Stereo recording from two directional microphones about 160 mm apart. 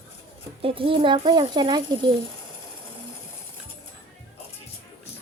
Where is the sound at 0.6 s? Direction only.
35° right (ahead or behind).